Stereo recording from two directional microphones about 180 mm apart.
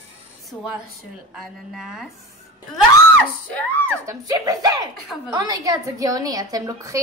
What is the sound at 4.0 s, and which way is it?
A woman's voice, 20° right (ahead or behind).